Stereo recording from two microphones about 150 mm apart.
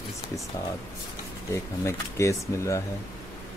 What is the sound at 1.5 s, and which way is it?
Speech, 20° left (ahead or behind).